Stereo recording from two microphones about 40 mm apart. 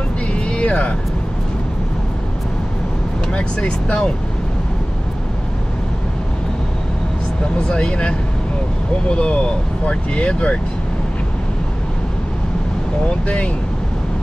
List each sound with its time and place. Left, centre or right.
0.3 s vehicle: left
3.3 s speech: left
7.5 s speech: left